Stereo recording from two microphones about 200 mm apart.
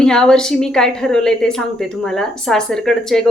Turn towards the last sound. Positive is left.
turn(degrees=0)  # may be behind; listen again after turning